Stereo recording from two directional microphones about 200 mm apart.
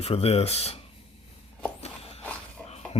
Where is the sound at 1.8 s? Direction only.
30° left (ahead or behind).